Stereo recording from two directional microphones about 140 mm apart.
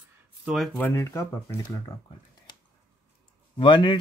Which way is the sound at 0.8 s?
20° left (ahead or behind).